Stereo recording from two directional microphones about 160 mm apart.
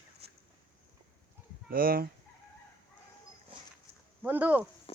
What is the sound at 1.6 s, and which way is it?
Speech, 65° right (ahead or behind).